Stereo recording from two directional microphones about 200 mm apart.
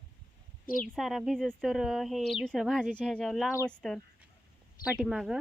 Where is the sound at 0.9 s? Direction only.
Centre (ahead or behind).